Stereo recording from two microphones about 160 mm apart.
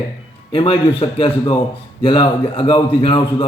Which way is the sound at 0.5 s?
30° left (ahead or behind).